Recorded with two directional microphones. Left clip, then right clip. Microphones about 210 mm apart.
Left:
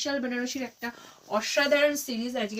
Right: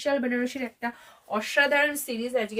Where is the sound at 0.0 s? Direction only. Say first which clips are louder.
Right 4 dB; 55° right (ahead or behind).